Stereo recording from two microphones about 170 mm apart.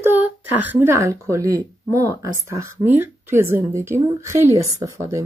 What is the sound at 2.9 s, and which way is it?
Speech, 15° right (ahead or behind).